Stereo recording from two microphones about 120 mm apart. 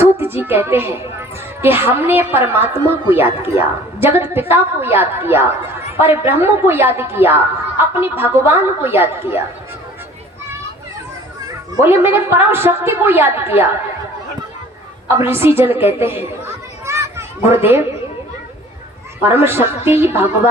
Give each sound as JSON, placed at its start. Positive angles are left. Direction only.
{"t": 0.0, "sound": "a woman's voice", "side_deg": -20}
{"t": 11.8, "sound": "a woman's voice", "side_deg": -20}
{"t": 15.2, "sound": "a woman's voice", "side_deg": -20}
{"t": 16.8, "sound": "children playing", "side_deg": -25}
{"t": 19.2, "sound": "a woman's voice", "side_deg": -20}